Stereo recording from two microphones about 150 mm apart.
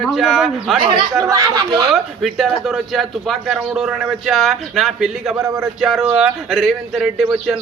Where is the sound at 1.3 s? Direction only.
30° right (ahead or behind).